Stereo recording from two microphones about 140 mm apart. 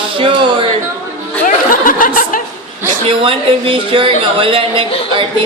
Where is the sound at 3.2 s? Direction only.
40° right (ahead or behind).